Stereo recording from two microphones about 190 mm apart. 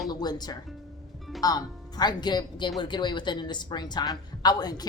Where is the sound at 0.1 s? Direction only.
20° left (ahead or behind).